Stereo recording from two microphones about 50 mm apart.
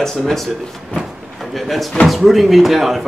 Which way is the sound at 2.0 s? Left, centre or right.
Centre.